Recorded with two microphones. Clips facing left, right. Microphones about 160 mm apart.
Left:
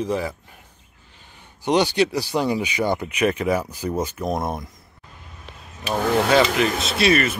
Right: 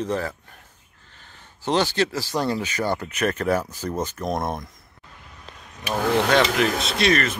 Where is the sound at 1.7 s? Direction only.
15° left (ahead or behind).